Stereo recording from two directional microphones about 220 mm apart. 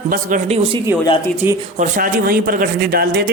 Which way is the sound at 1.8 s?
40° right (ahead or behind).